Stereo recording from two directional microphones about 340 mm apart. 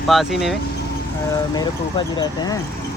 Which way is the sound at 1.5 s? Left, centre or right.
Centre.